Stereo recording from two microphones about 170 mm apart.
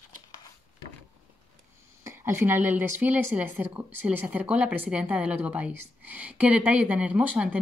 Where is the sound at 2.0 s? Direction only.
15° right (ahead or behind).